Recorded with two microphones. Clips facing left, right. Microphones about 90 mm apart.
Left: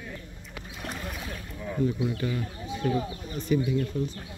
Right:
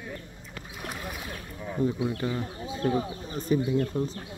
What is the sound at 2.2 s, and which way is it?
Speech, 30° right (ahead or behind).